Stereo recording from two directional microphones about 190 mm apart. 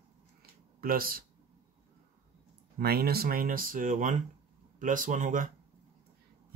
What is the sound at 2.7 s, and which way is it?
Speech, 55° right (ahead or behind).